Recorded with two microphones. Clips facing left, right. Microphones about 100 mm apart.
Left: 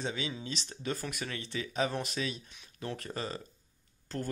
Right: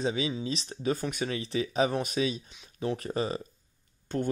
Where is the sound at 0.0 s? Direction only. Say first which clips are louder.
Right 7 dB; 20° right (ahead or behind).